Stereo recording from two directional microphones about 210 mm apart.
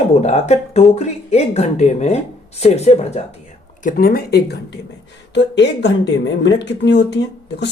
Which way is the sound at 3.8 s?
45° left (ahead or behind).